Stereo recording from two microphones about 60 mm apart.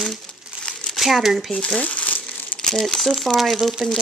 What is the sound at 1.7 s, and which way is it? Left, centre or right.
Crumpling, left.